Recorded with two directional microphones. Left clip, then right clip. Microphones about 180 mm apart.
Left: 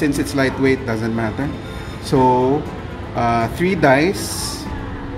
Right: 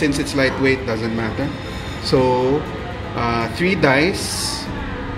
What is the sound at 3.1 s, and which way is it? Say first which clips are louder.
Speech: left 3 dB; 30° left (ahead or behind).